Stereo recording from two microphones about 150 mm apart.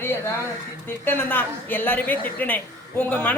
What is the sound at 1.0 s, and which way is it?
Speech, 15° left (ahead or behind).